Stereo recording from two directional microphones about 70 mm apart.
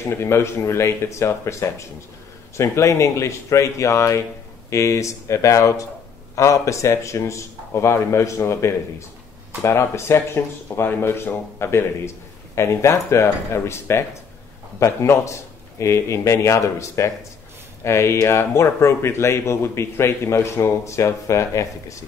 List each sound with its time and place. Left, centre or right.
0.1 s speech: left